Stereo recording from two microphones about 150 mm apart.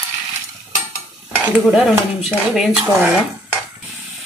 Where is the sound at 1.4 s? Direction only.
5° right (ahead or behind).